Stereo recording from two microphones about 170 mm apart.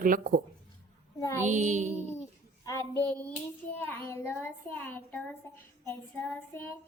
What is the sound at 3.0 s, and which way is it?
A woman's voice, 5° left (ahead or behind).